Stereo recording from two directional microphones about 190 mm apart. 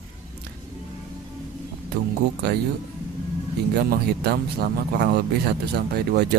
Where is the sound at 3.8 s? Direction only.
55° right (ahead or behind).